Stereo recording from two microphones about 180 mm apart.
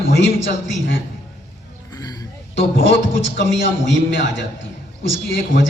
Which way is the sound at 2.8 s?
90° left.